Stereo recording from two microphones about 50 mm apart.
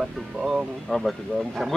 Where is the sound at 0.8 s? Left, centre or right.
Centre.